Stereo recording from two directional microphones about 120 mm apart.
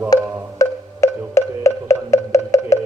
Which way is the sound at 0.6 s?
25° left (ahead or behind).